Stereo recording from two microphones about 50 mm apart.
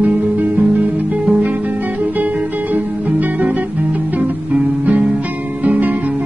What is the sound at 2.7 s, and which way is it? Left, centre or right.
Music, right.